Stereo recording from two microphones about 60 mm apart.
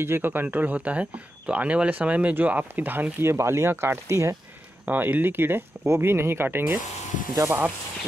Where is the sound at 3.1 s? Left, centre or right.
Right.